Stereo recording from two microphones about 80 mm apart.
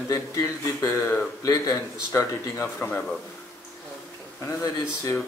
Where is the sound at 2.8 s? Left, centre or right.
Left.